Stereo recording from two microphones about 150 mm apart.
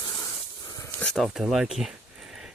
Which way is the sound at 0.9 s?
5° left (ahead or behind).